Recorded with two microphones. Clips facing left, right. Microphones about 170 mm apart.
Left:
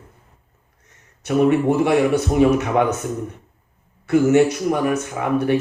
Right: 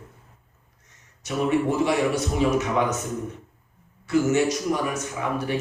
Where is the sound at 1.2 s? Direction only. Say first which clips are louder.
Left 7 dB; 60° left (ahead or behind).